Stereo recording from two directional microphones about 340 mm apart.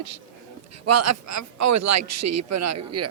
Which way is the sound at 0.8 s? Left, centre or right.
Right.